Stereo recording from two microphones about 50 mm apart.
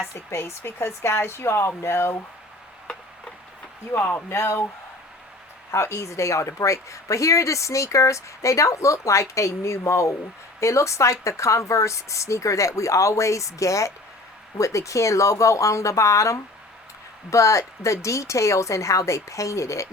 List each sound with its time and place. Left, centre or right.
0.1 s speech: left
3.9 s speech: left
4.3 s speech: left
5.7 s speech: left